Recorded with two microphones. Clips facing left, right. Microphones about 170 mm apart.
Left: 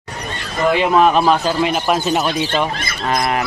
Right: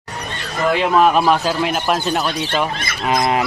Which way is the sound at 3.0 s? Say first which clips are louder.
Right 1 dB; 20° right (ahead or behind).